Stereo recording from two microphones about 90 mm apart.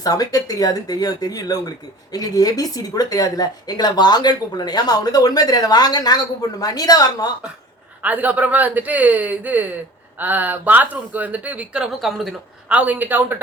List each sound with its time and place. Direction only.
0.0 s speech: 45° left (ahead or behind)
8.0 s speech: 20° right (ahead or behind)
11.9 s speech: centre (ahead or behind)
12.6 s speech: 15° right (ahead or behind)